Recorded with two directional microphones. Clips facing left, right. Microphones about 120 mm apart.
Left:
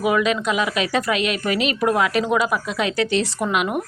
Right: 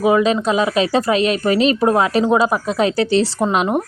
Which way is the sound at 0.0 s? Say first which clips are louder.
Right 5 dB; 30° right (ahead or behind).